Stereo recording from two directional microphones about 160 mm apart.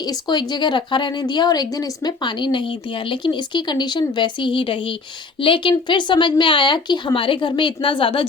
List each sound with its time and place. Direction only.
0.0 s speech: 25° left (ahead or behind)